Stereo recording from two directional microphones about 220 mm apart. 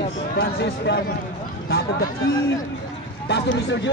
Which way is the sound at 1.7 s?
45° left (ahead or behind).